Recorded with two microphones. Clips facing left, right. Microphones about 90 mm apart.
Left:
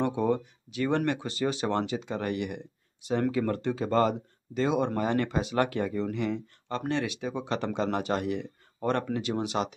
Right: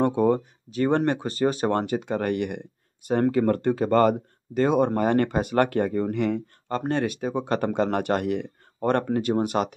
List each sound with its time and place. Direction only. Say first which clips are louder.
0.0 s speech: right 6 dB; 45° right (ahead or behind)
6.9 s speech: right 5 dB; 45° right (ahead or behind)